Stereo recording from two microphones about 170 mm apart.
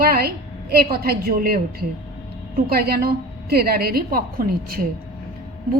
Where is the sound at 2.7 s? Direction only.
65° right (ahead or behind).